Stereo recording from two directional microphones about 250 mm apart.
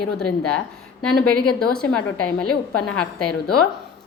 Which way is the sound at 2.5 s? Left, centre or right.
Left.